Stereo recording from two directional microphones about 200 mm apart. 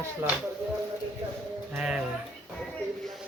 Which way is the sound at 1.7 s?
5° right (ahead or behind).